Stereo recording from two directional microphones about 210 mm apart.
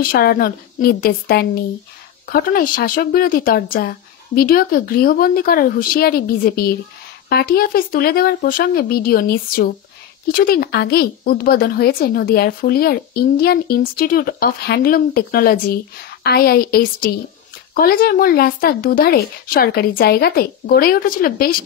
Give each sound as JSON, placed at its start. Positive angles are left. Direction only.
{"t": 0.0, "sound": "a woman's voice", "side_deg": 45}